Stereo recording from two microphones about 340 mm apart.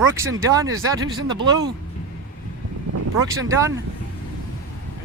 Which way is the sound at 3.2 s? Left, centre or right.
Centre.